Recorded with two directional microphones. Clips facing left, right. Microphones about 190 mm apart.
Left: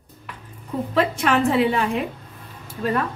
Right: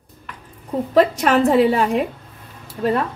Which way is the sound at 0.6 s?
40° right (ahead or behind).